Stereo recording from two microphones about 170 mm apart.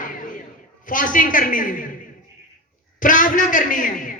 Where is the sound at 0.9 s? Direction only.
50° left (ahead or behind).